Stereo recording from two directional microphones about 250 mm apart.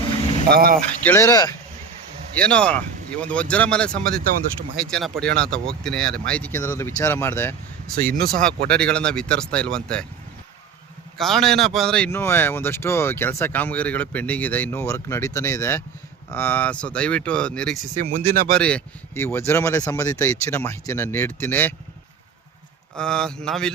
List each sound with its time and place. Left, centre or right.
0.4 s speech: right
1.0 s speech: centre
7.9 s speech: right
8.7 s speech: centre
11.2 s speech: centre
17.9 s speech: right
18.5 s speech: centre
23.0 s speech: centre